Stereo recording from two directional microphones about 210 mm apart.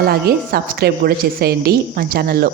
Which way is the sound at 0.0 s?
50° right (ahead or behind).